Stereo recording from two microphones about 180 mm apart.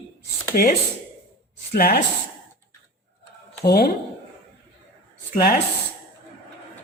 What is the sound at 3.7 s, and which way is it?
Speech, 60° left (ahead or behind).